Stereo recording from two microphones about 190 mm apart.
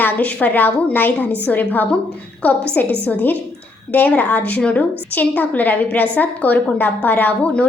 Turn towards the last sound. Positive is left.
turn(degrees=5)  # may be behind; listen again after turning